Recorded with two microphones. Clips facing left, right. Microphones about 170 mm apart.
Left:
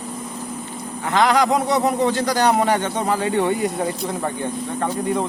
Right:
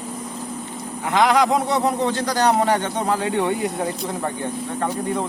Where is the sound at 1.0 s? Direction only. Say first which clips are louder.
Even; 5° right (ahead or behind).